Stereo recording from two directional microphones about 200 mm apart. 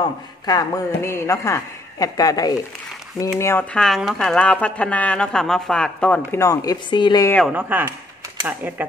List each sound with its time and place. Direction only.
0.0 s a man's voice: 20° left (ahead or behind)
7.5 s speech: 10° right (ahead or behind)